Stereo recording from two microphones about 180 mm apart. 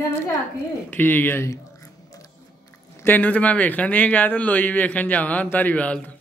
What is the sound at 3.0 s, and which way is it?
A man's voice, 10° left (ahead or behind).